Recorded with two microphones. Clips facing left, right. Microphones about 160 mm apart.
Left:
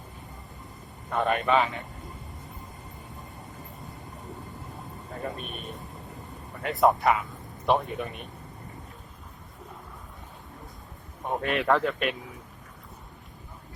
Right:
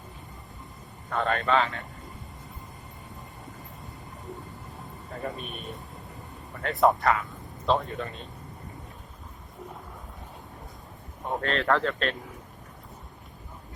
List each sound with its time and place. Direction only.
1.1 s speech: 15° left (ahead or behind)
5.1 s a man's voice: centre (ahead or behind)
7.0 s a man's voice: 15° left (ahead or behind)
11.3 s speech: 10° left (ahead or behind)